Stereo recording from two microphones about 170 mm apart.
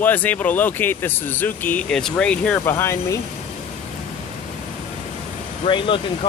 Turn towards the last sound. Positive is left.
turn(degrees=30)  # may be behind; listen again after turning